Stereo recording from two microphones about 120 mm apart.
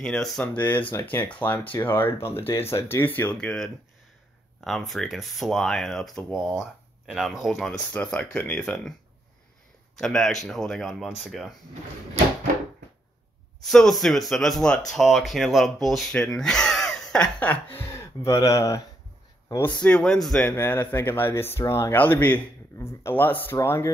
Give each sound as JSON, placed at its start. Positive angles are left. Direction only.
{"t": 0.0, "sound": "speech", "side_deg": 5}
{"t": 3.3, "sound": "speech", "side_deg": 5}
{"t": 7.9, "sound": "speech", "side_deg": 10}
{"t": 9.9, "sound": "speech", "side_deg": 5}
{"t": 13.7, "sound": "speech", "side_deg": 5}
{"t": 18.2, "sound": "speech", "side_deg": 25}
{"t": 19.8, "sound": "speech", "side_deg": 10}
{"t": 20.4, "sound": "speech", "side_deg": 15}